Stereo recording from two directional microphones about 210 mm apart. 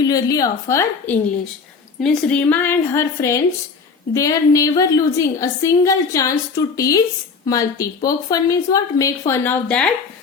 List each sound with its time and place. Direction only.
0.0 s a woman's voice: 15° left (ahead or behind)